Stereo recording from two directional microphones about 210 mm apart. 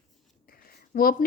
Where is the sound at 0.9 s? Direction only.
40° left (ahead or behind).